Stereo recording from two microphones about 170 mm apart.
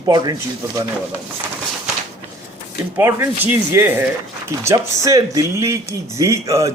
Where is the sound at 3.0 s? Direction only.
15° right (ahead or behind).